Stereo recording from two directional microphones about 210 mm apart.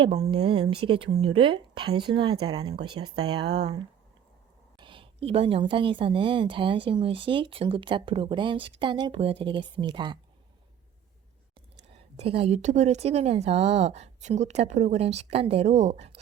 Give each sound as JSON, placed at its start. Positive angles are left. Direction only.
{"t": 0.0, "sound": "a woman's voice", "side_deg": -25}
{"t": 4.8, "sound": "a woman's voice", "side_deg": -25}
{"t": 11.9, "sound": "speech", "side_deg": -30}